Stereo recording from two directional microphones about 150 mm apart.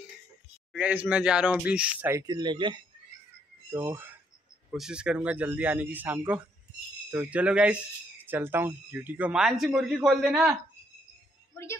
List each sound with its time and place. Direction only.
0.7 s speech: 10° right (ahead or behind)
2.1 s speech: 25° right (ahead or behind)
3.7 s speech: 15° right (ahead or behind)
4.6 s speech: 5° right (ahead or behind)
11.6 s a woman's voice: 20° left (ahead or behind)